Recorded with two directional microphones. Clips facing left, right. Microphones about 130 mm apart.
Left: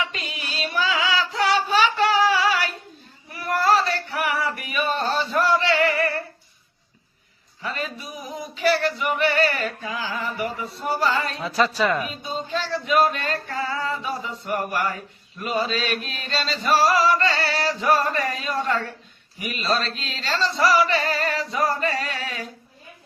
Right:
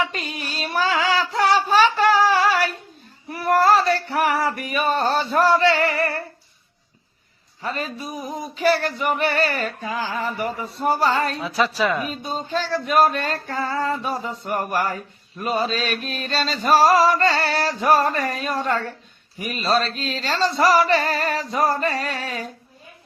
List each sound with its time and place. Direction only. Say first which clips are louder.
0.0 s female singing: right 4 dB; 40° right (ahead or behind)
7.6 s a man's voice: right 2 dB; 35° right (ahead or behind)
8.5 s music: right 1 dB; 40° right (ahead or behind)
11.3 s speech: even; 5° right (ahead or behind)
12.2 s chant: right 2 dB; 45° right (ahead or behind)